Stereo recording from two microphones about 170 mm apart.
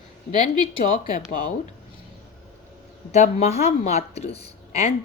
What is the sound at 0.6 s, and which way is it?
Speech, 50° left (ahead or behind).